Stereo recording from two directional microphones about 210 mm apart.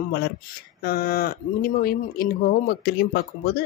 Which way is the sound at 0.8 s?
45° left (ahead or behind).